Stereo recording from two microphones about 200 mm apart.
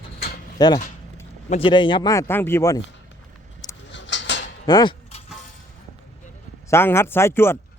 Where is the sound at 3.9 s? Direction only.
65° left (ahead or behind).